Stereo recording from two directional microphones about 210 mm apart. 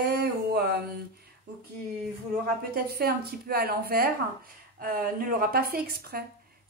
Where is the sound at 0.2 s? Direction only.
50° right (ahead or behind).